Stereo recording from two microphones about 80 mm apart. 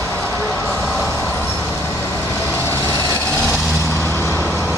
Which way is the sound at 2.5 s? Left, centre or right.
Left.